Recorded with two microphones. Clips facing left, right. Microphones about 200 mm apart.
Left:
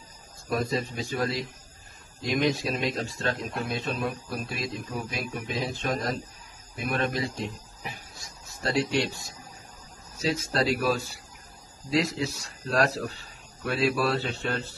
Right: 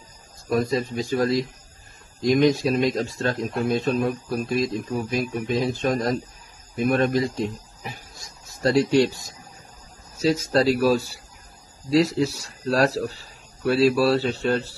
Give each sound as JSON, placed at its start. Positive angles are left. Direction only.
{"t": 0.5, "sound": "speech", "side_deg": -40}